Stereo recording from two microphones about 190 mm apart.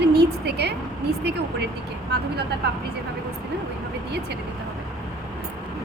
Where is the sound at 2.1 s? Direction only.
55° right (ahead or behind).